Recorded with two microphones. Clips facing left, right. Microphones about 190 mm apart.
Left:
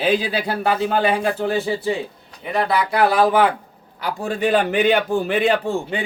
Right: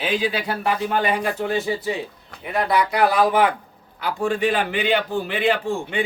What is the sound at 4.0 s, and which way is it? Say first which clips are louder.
A man's voice: even; 40° left (ahead or behind).